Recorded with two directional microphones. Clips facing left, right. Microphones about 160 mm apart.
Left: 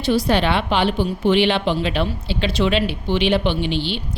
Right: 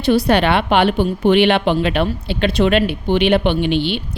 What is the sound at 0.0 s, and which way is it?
A woman's voice, 60° right (ahead or behind).